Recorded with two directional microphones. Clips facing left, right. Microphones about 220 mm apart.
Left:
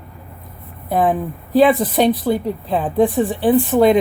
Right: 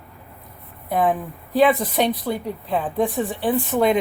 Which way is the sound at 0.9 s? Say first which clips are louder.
Left 3 dB; 35° left (ahead or behind).